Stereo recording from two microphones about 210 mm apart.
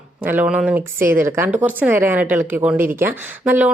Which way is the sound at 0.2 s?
10° right (ahead or behind).